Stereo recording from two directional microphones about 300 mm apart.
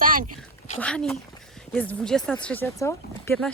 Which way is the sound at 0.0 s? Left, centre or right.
Right.